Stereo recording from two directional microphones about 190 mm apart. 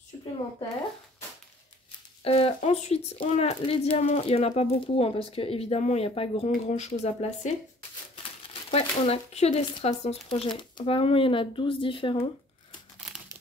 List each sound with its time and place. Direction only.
2.2 s speech: 30° left (ahead or behind)